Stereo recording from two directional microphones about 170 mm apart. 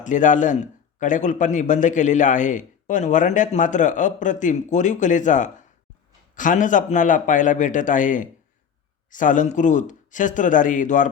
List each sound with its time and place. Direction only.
0.0 s a man's voice: 45° left (ahead or behind)